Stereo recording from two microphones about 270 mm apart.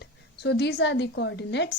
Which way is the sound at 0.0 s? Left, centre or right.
Left.